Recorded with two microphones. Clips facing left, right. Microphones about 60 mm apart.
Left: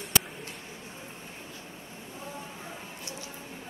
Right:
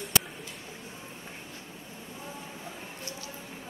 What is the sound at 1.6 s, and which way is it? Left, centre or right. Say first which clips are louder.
Vehicle: left 1 dB; centre.